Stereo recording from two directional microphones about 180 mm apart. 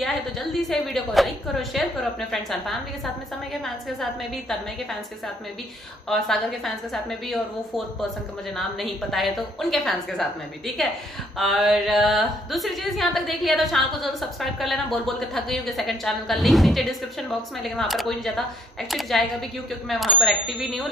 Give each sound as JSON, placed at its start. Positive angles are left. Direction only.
{"t": 0.0, "sound": "a woman's voice", "side_deg": 0}
{"t": 6.0, "sound": "a woman's voice", "side_deg": 0}
{"t": 11.3, "sound": "a woman's voice", "side_deg": 0}